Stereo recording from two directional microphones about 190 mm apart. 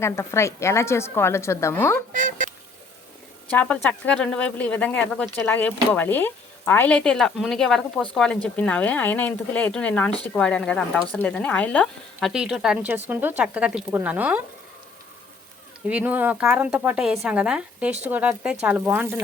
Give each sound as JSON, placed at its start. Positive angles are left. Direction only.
{"t": 0.0, "sound": "speech", "side_deg": 15}
{"t": 2.1, "sound": "speech", "side_deg": -45}
{"t": 3.5, "sound": "speech", "side_deg": 10}
{"t": 15.9, "sound": "speech", "side_deg": -10}